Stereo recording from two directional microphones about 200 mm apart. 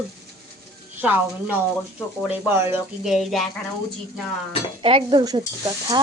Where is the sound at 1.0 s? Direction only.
10° right (ahead or behind).